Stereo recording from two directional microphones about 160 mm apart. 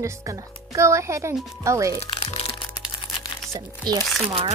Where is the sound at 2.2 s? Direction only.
40° left (ahead or behind).